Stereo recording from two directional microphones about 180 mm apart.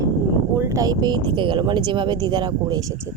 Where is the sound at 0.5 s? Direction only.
15° right (ahead or behind).